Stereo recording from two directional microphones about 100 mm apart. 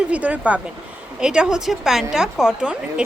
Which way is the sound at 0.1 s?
15° right (ahead or behind).